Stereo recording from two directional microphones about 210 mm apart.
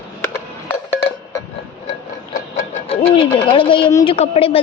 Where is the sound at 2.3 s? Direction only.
35° left (ahead or behind).